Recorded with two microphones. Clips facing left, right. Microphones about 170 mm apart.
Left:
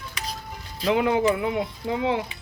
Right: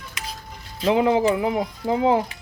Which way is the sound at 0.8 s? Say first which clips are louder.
Right 3 dB; 30° right (ahead or behind).